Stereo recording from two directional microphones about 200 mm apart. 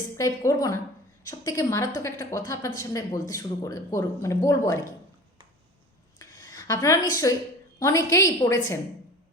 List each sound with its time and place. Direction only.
0.2 s speech: 15° left (ahead or behind)
6.1 s a sound: 15° left (ahead or behind)
7.8 s speech: 15° left (ahead or behind)